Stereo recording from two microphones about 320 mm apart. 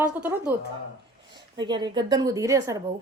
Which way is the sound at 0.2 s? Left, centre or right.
Centre.